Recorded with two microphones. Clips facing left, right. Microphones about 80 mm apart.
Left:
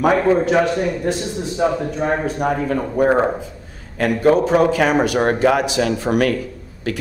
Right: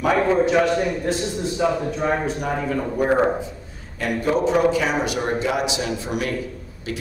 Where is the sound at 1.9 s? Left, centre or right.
Left.